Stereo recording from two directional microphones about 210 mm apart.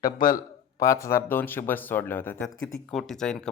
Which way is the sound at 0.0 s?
40° left (ahead or behind).